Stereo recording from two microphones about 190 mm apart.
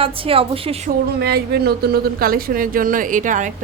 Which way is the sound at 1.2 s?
55° right (ahead or behind).